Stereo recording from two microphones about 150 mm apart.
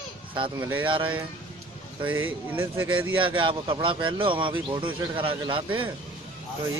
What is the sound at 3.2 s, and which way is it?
Speech, 35° right (ahead or behind).